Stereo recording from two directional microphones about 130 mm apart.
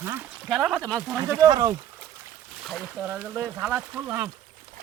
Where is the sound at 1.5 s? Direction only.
30° right (ahead or behind).